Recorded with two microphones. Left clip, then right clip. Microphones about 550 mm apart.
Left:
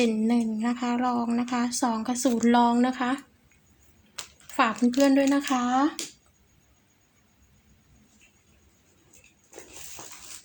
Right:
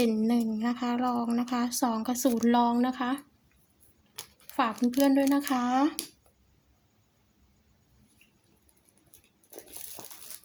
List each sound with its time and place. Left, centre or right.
0.0 s speech: right